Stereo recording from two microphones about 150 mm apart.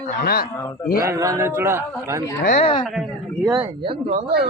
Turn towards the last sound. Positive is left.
turn(degrees=-40)  # may be behind; listen again after turning